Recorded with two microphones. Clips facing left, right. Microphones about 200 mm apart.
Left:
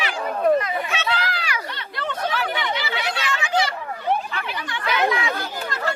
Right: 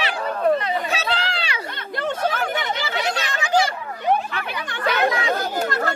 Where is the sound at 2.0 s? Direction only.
45° right (ahead or behind).